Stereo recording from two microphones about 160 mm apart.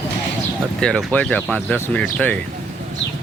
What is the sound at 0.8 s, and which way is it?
Speech, 5° left (ahead or behind).